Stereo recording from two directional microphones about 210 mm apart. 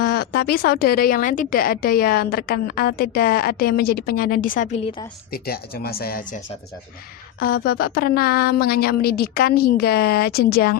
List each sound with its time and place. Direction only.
0.0 s speech: 50° left (ahead or behind)